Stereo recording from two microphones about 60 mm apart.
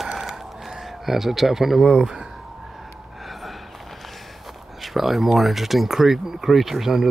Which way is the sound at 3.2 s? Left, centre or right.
Centre.